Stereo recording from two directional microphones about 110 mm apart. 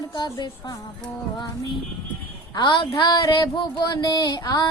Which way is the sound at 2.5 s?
40° left (ahead or behind).